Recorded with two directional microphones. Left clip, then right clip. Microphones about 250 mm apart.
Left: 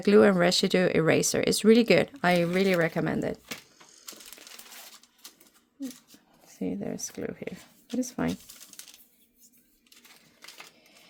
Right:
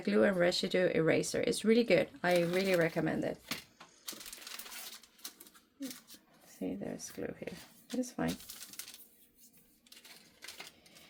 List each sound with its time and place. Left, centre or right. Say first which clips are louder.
0.0 s speech: left 9 dB; left
6.6 s speech: left 7 dB; left